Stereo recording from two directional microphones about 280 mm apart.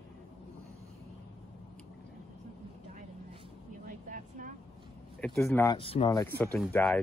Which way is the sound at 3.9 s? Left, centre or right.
Right.